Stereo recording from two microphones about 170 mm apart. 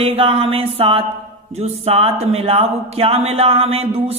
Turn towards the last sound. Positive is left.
turn(degrees=-35)  # may be behind; listen again after turning